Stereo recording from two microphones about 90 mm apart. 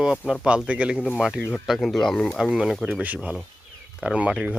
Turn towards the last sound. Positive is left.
turn(degrees=-15)  # may be behind; listen again after turning